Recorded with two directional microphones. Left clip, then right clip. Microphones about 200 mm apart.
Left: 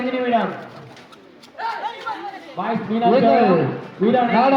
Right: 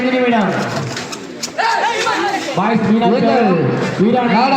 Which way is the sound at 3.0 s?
45° right (ahead or behind).